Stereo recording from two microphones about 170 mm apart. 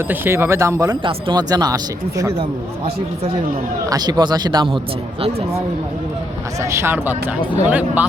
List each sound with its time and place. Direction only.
0.1 s speech: 15° right (ahead or behind)
3.8 s speech: 25° right (ahead or behind)
6.6 s speech: 15° right (ahead or behind)